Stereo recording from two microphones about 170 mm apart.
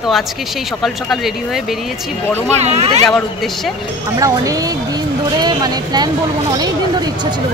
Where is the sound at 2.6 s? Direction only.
40° right (ahead or behind).